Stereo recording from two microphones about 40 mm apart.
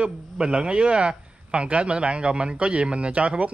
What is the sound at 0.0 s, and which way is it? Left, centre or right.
A man's voice, right.